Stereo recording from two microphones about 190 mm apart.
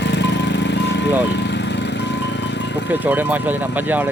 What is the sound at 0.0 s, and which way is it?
Music, 65° left (ahead or behind).